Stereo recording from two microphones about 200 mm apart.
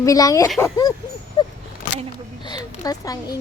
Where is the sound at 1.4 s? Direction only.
20° left (ahead or behind).